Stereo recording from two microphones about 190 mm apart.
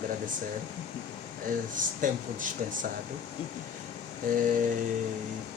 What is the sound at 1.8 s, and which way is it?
Speech, 45° right (ahead or behind).